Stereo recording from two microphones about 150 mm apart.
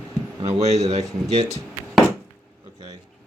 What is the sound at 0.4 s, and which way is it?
Speech, 50° right (ahead or behind).